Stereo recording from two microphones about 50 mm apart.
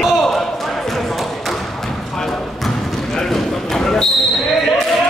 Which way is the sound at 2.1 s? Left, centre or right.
Centre.